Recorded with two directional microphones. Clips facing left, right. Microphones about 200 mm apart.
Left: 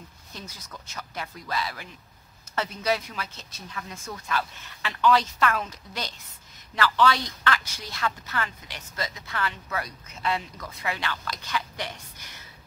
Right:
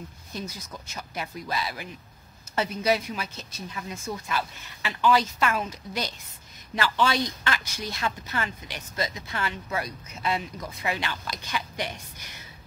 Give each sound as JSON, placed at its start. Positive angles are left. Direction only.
{"t": 0.3, "sound": "a woman's voice", "side_deg": -15}